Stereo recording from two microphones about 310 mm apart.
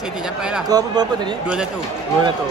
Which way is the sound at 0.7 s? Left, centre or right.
Centre.